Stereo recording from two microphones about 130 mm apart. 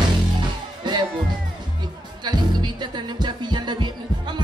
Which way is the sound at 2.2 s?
35° right (ahead or behind).